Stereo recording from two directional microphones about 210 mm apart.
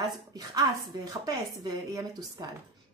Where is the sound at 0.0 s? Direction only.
20° right (ahead or behind).